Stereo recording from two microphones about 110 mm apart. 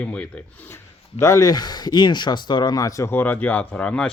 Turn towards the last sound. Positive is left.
turn(degrees=10)  # may be behind; listen again after turning